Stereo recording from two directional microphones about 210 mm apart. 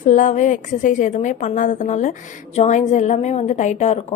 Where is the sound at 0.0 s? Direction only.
35° left (ahead or behind).